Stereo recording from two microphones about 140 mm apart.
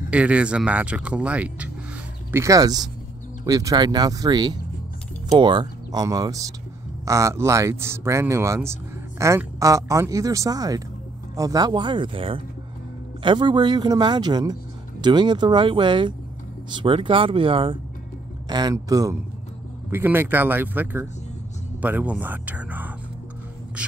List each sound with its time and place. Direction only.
0.1 s speech: 10° right (ahead or behind)
2.3 s speech: 25° right (ahead or behind); by 17.7 s 40° right (ahead or behind)
18.5 s speech: 30° right (ahead or behind); by 22.9 s 10° right (ahead or behind)